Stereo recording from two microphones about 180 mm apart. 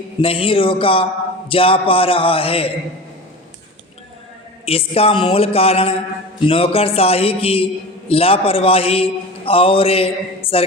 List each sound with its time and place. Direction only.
0.2 s a man's voice: 30° left (ahead or behind)
4.6 s a man's voice: 35° left (ahead or behind)